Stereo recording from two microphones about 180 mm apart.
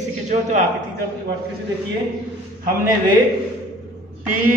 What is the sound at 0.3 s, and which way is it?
Speech, 45° right (ahead or behind).